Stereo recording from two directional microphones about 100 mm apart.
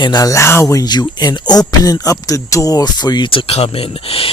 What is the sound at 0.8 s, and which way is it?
Speech, 45° left (ahead or behind).